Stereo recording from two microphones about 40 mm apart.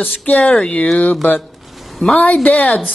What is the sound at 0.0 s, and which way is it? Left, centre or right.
Speech, left.